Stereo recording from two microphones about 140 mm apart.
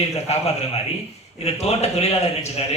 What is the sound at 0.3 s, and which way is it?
Speech, 50° left (ahead or behind).